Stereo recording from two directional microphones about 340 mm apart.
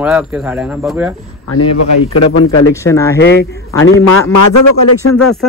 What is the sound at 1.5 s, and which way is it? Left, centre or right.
Speech, left.